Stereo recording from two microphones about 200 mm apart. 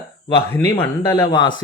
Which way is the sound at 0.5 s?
10° left (ahead or behind).